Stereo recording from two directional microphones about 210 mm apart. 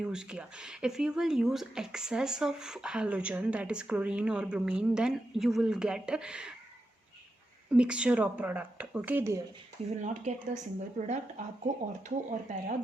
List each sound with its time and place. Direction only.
0.0 s speech: 5° right (ahead or behind)
7.7 s a woman's voice: 5° right (ahead or behind)
10.0 s speech: 35° right (ahead or behind)